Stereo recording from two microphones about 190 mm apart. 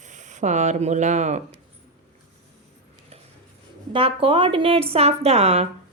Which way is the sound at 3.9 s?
30° right (ahead or behind).